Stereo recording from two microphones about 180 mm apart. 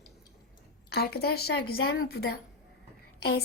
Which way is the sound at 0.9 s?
60° left (ahead or behind).